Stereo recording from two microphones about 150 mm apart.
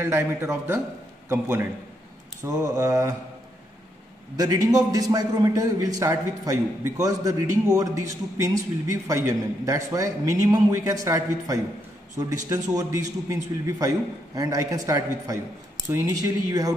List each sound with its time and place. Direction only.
0.0 s a man's voice: 15° right (ahead or behind)
4.4 s a man's voice: 25° right (ahead or behind)